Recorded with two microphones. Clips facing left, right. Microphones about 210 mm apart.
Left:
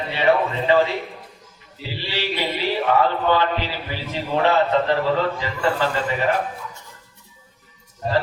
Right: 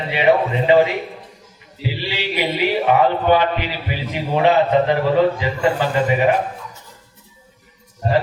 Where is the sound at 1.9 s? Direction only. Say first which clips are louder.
Right 2 dB; 15° right (ahead or behind).